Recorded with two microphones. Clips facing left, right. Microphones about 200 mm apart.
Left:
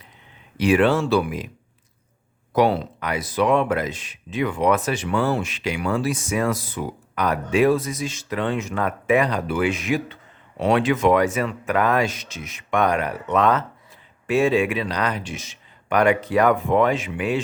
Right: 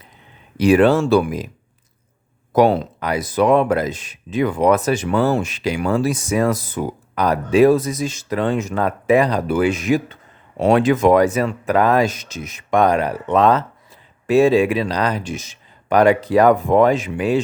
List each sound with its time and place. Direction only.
0.5 s speech: 40° right (ahead or behind)
2.5 s speech: 45° right (ahead or behind)